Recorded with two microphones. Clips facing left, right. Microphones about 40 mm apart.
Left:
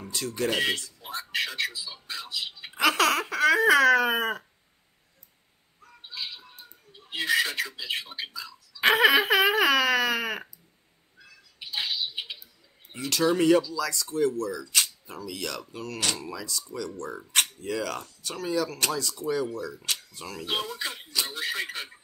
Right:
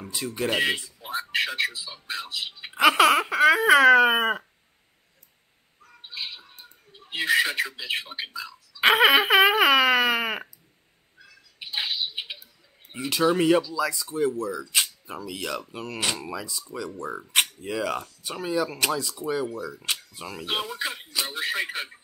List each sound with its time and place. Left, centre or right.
0.0 s speech: centre
6.0 s bird: centre
6.9 s speech: centre
11.6 s a sound: centre
12.9 s speech: centre